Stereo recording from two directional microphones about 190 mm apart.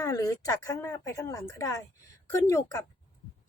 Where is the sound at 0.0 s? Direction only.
15° left (ahead or behind).